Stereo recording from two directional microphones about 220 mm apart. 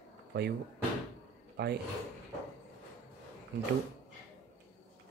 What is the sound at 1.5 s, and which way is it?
Speech, 50° right (ahead or behind).